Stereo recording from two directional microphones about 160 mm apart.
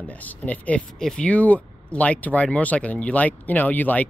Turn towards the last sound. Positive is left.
turn(degrees=10)  # may be behind; listen again after turning